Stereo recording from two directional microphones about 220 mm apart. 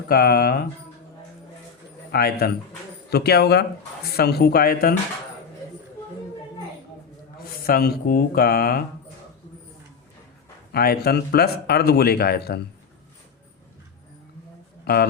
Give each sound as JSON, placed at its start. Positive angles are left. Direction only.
{"t": 0.1, "sound": "speech", "side_deg": 45}
{"t": 2.1, "sound": "speech", "side_deg": 45}
{"t": 7.3, "sound": "speech", "side_deg": 40}
{"t": 10.7, "sound": "speech", "side_deg": 45}
{"t": 14.9, "sound": "speech", "side_deg": 45}